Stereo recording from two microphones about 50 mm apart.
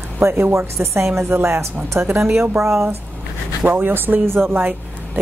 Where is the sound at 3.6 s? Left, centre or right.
Right.